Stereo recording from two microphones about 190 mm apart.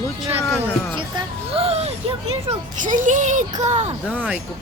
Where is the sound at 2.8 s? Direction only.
40° right (ahead or behind).